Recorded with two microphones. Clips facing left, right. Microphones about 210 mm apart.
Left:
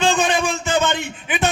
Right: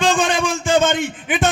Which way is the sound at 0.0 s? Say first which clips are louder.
Right 1 dB; 50° right (ahead or behind).